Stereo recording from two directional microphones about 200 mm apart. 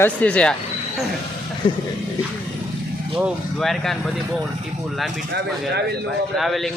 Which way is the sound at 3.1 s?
Centre (ahead or behind).